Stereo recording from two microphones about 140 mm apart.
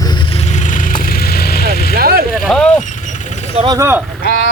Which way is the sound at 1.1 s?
90° left.